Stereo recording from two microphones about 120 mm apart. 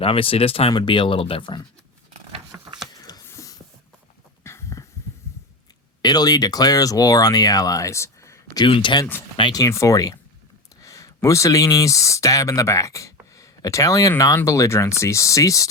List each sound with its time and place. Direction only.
0.0 s speech: 50° left (ahead or behind)
0.7 s speech: 40° left (ahead or behind)
2.5 s a sound: 20° right (ahead or behind)
2.9 s a sound: 30° left (ahead or behind)
4.4 s heart sounds: 25° left (ahead or behind)
6.0 s speech: 35° left (ahead or behind)
8.6 s speech: 45° left (ahead or behind); by 15.6 s 25° left (ahead or behind)